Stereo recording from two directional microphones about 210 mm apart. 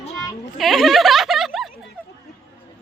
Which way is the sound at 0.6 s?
Centre (ahead or behind).